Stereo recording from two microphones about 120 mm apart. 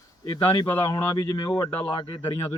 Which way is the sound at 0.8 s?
25° left (ahead or behind).